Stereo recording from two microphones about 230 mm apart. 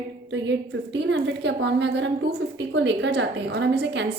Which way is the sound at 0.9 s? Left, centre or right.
Right.